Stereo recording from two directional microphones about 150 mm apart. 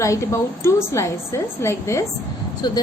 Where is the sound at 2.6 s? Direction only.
30° left (ahead or behind).